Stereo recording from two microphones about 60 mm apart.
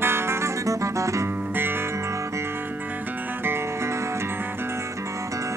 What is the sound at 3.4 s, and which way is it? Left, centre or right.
Music, right.